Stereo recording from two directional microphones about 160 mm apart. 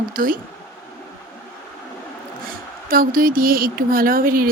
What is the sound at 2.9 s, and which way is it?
Speech, 65° right (ahead or behind).